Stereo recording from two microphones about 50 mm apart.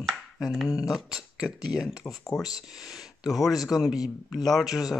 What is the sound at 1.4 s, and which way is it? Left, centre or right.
Speech, centre.